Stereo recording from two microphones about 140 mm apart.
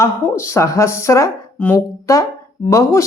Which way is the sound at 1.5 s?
10° left (ahead or behind).